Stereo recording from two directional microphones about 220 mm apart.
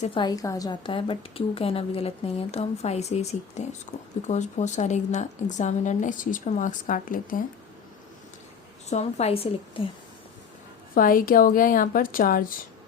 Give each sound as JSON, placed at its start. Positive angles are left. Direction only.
{"t": 0.0, "sound": "a woman's voice", "side_deg": 20}
{"t": 8.9, "sound": "a woman's voice", "side_deg": 30}
{"t": 10.9, "sound": "speech", "side_deg": 40}